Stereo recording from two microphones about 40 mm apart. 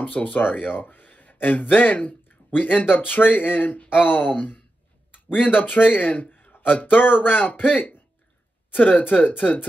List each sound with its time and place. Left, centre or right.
0.0 s speech: left